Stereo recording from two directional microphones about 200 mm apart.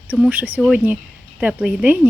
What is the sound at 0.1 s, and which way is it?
Speech, 10° right (ahead or behind).